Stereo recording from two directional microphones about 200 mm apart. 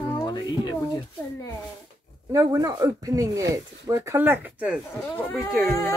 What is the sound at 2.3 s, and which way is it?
Speech, 15° right (ahead or behind).